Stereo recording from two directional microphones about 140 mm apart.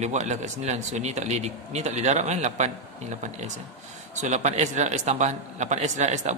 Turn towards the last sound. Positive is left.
turn(degrees=-55)  # may be behind; listen again after turning